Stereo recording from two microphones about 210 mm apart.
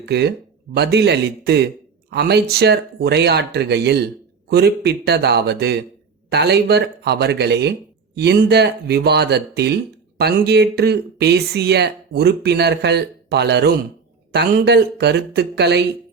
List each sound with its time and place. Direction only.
0.0 s speech: 50° right (ahead or behind)